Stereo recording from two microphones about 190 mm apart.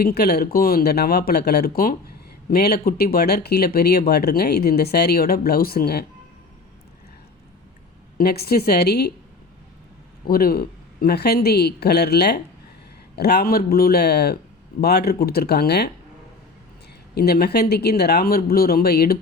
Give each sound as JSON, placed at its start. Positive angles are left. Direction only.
{"t": 0.0, "sound": "speech", "side_deg": 55}
{"t": 8.2, "sound": "speech", "side_deg": 55}
{"t": 10.2, "sound": "speech", "side_deg": 50}
{"t": 17.2, "sound": "speech", "side_deg": 55}